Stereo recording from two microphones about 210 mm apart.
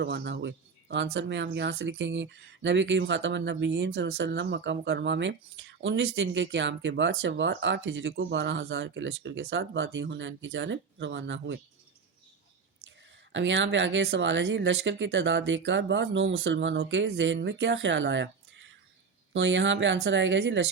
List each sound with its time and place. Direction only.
0.0 s speech: 55° right (ahead or behind)
13.3 s speech: 60° right (ahead or behind)
19.3 s speech: 60° right (ahead or behind)